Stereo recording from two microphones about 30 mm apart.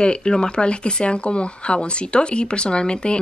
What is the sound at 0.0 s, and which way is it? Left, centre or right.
Speech, left.